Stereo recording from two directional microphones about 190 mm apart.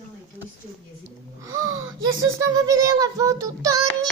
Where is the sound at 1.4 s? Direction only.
15° right (ahead or behind).